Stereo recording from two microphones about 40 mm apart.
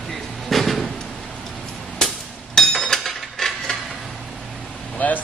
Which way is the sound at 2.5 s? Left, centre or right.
Centre.